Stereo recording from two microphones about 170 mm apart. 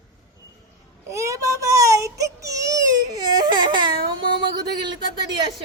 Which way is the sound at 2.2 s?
20° right (ahead or behind).